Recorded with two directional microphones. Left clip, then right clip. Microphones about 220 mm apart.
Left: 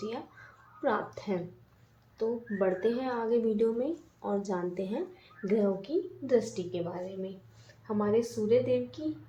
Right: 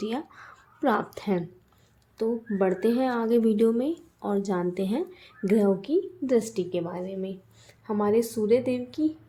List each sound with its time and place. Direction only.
0.8 s a woman's voice: 45° right (ahead or behind)